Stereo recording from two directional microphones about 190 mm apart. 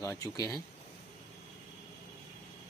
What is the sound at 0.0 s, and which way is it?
Speech, 15° left (ahead or behind).